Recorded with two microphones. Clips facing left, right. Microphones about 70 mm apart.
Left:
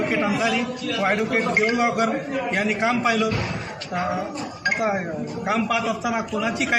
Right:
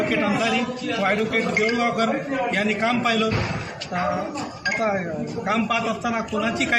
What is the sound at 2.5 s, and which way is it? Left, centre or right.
Speech, centre.